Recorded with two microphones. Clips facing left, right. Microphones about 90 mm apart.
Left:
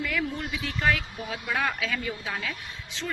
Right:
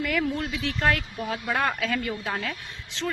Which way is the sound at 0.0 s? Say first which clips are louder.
Right 4 dB; 60° right (ahead or behind).